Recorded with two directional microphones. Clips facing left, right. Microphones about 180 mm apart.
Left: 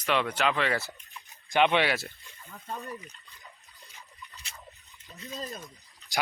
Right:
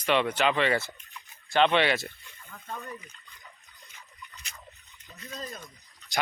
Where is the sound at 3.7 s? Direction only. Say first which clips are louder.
Left 1 dB; 35° left (ahead or behind).